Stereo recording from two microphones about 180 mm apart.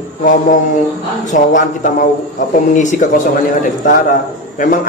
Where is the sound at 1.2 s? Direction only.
45° left (ahead or behind).